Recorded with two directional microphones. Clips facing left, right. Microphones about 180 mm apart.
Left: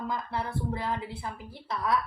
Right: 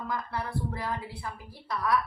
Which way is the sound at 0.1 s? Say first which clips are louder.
Right 3 dB; 25° left (ahead or behind).